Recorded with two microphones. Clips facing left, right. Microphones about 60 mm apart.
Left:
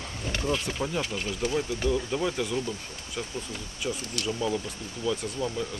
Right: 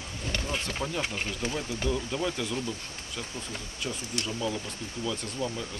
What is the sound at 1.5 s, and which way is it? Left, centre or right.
Speech, centre.